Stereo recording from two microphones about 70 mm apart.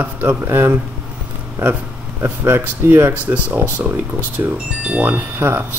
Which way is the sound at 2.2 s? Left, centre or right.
Right.